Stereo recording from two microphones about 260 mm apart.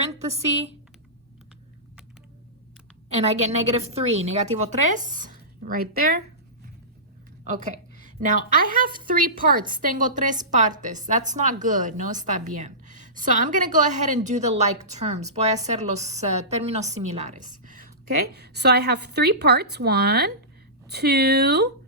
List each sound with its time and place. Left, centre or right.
3.1 s a woman's voice: right
7.4 s a woman's voice: right